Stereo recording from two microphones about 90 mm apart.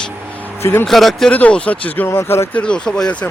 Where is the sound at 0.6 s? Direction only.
25° left (ahead or behind).